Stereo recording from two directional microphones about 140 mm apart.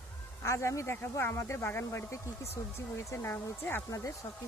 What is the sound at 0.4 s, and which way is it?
Speech, 20° left (ahead or behind).